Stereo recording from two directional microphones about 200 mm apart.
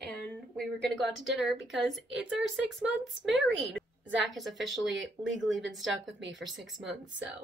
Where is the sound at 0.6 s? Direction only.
Centre (ahead or behind).